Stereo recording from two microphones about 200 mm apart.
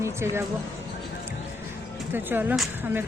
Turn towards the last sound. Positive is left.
turn(degrees=-10)  # may be behind; listen again after turning